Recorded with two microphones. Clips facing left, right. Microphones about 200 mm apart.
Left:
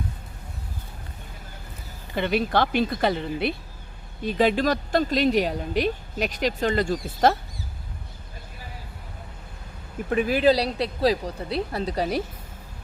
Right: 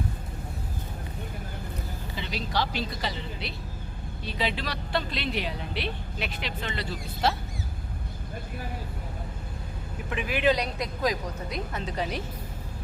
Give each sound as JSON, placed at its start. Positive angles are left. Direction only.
{"t": 2.1, "sound": "a woman's voice", "side_deg": 55}
{"t": 10.1, "sound": "speech", "side_deg": 40}